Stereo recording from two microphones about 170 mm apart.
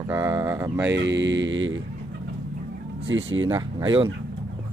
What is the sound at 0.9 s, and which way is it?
Speech, 90° right.